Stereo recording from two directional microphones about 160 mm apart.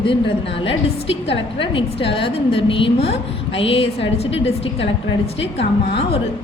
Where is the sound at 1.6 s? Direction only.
35° left (ahead or behind).